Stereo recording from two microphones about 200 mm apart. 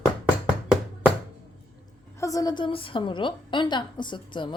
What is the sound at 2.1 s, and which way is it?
A woman's voice, 15° left (ahead or behind).